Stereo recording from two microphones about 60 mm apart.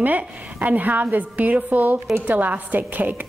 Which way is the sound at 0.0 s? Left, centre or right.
Right.